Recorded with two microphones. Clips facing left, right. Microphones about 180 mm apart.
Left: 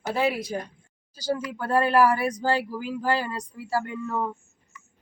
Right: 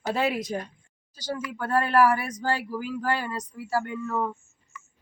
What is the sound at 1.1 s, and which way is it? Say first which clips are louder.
Speech: left 4 dB; 30° left (ahead or behind).